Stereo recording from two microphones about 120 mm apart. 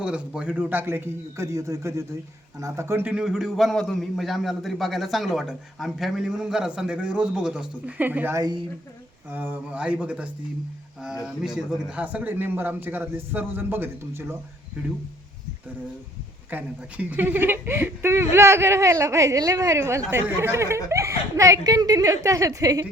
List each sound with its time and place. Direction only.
0.0 s speech: 10° right (ahead or behind)
3.1 s a man's voice: 5° right (ahead or behind)
8.4 s speech: 35° right (ahead or behind)
9.3 s a man's voice: 15° right (ahead or behind)
11.4 s a man's voice: 5° right (ahead or behind); by 14.3 s 20° right (ahead or behind)
16.5 s speech: 15° right (ahead or behind); by 22.9 s 30° right (ahead or behind)